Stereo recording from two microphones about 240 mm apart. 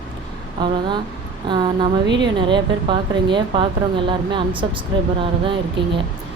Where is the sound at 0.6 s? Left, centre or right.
Centre.